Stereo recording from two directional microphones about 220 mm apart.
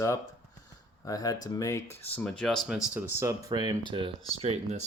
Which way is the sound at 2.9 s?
10° right (ahead or behind).